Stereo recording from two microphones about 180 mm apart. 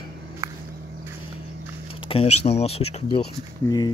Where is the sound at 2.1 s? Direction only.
35° left (ahead or behind).